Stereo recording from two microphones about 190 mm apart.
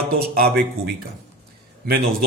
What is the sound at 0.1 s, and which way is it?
Speech, 55° right (ahead or behind).